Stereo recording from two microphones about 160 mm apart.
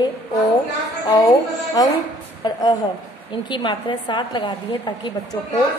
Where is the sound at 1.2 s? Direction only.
25° left (ahead or behind).